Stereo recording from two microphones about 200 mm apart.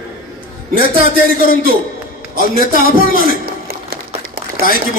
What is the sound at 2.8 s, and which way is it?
Speech, 45° left (ahead or behind).